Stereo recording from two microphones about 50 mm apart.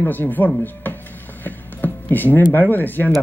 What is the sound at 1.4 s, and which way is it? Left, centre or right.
Speech, left.